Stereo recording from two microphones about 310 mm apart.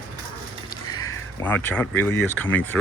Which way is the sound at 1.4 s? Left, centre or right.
Centre.